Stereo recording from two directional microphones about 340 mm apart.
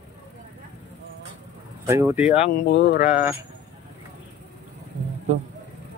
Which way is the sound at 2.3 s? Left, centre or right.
Left.